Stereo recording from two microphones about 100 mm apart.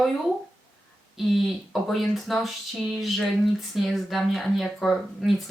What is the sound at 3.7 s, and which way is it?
Speech, centre (ahead or behind).